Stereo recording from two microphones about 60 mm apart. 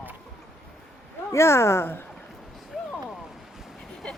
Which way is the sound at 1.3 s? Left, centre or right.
Left.